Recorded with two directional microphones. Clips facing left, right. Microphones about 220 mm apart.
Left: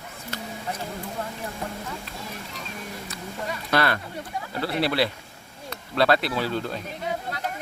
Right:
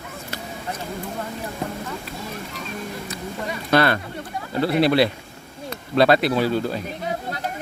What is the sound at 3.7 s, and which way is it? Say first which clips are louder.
Speech: right 6 dB; 25° right (ahead or behind).